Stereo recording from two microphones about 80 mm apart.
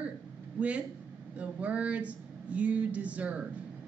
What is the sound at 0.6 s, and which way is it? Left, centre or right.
Speech, centre.